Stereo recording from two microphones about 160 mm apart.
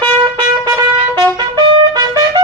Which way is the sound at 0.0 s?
30° right (ahead or behind).